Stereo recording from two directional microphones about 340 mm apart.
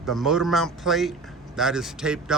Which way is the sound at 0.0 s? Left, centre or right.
Centre.